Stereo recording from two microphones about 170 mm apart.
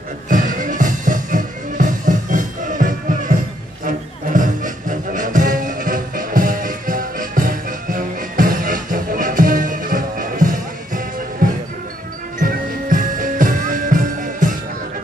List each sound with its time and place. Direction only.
0.3 s music: 50° right (ahead or behind)